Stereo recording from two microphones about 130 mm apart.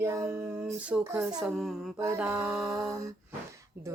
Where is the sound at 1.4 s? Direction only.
Centre (ahead or behind).